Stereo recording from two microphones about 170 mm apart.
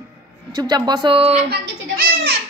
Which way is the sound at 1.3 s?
65° right (ahead or behind).